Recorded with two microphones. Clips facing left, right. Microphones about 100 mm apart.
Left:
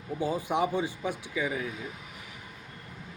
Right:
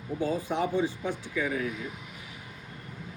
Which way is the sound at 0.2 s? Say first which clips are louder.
Left 1 dB; 15° left (ahead or behind).